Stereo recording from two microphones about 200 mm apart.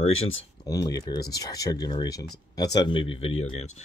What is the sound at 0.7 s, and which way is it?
Speech, 20° left (ahead or behind).